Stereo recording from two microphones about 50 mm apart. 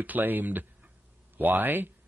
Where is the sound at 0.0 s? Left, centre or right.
Right.